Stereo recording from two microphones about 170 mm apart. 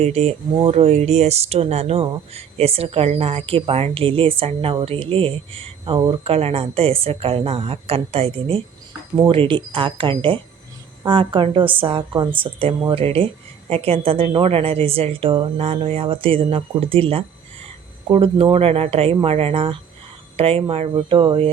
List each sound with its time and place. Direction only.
0.0 s speech: 40° right (ahead or behind)